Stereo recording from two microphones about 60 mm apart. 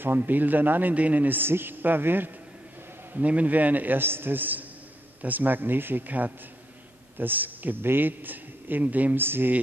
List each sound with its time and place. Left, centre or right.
0.0 s a man's voice: right
3.1 s a man's voice: right